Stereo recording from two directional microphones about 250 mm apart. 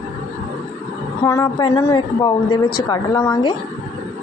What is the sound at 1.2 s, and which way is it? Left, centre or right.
A woman's voice, centre.